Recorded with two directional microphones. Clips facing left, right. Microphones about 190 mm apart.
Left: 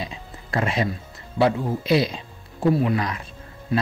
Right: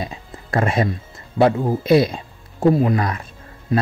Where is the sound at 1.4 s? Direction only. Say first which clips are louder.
Right 4 dB; 50° right (ahead or behind).